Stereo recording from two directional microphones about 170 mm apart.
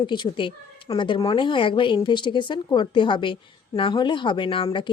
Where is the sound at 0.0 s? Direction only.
25° left (ahead or behind).